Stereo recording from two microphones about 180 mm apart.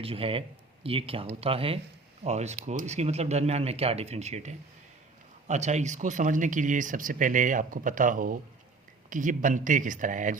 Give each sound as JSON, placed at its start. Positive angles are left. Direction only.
{"t": 0.0, "sound": "speech", "side_deg": -30}